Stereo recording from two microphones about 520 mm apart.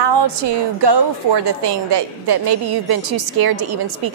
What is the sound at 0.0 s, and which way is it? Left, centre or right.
A woman's voice, right.